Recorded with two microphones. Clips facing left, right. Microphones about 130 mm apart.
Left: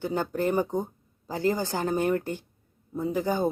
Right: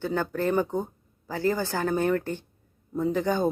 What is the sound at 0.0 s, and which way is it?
A woman's voice, 15° left (ahead or behind).